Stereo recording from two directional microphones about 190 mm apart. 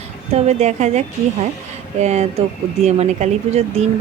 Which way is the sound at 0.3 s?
35° right (ahead or behind).